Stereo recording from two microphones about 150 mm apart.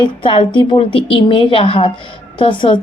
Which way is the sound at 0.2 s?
35° left (ahead or behind).